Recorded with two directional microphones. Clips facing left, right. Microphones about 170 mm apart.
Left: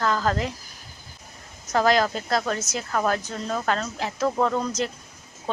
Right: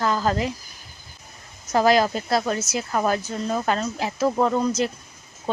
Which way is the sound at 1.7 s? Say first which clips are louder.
Right 2 dB; 10° right (ahead or behind).